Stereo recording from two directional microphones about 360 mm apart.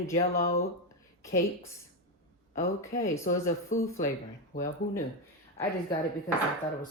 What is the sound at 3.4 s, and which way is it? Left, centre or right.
Speech, centre.